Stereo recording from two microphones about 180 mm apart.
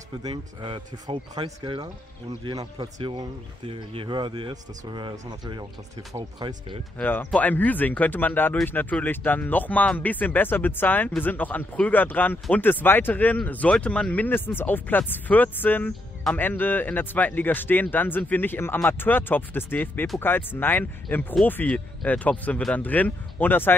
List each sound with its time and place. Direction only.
0.2 s speech: 25° right (ahead or behind)
7.0 s speech: 10° left (ahead or behind)